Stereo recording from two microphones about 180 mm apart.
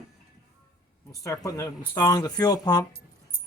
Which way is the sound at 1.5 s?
20° left (ahead or behind).